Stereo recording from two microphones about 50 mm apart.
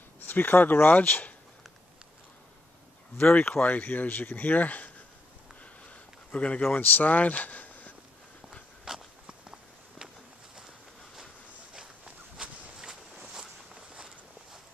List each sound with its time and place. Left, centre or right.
0.2 s speech: left
3.3 s speech: left
6.3 s speech: left
6.8 s speech: left
8.9 s walk: centre
11.7 s walk: centre